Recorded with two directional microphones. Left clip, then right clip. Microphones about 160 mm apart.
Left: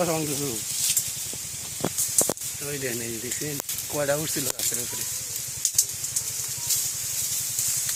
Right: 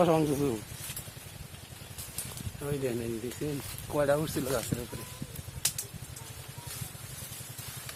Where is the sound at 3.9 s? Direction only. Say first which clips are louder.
Left 1 dB; 5° left (ahead or behind).